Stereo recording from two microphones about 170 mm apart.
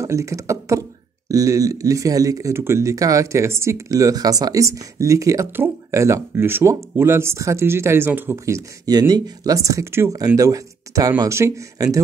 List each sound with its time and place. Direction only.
0.0 s speech: 20° right (ahead or behind)